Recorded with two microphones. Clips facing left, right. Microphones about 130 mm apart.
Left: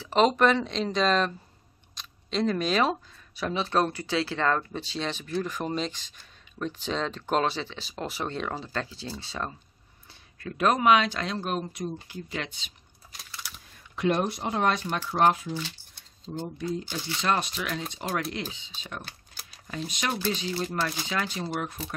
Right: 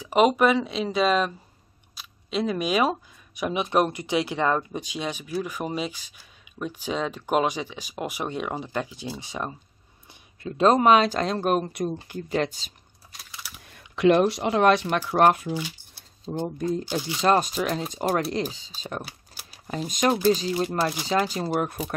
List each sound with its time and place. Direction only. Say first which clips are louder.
0.0 s speech: right 2 dB; 10° right (ahead or behind); by 12.7 s 40° right (ahead or behind)
13.1 s computer keyboard: even; centre (ahead or behind)
13.6 s speech: right 7 dB; 65° right (ahead or behind)
15.0 s speech: right 4 dB; 60° right (ahead or behind)
15.5 s shuffling cards: right 4 dB; 10° right (ahead or behind)
16.3 s speech: right 5 dB; 50° right (ahead or behind)
19.0 s a sound: right 2 dB; 5° right (ahead or behind)
19.7 s speech: right 8 dB; 45° right (ahead or behind)